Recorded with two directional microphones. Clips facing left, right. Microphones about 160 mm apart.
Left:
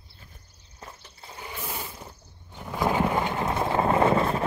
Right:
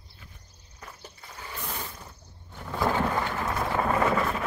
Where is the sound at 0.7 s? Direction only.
25° left (ahead or behind).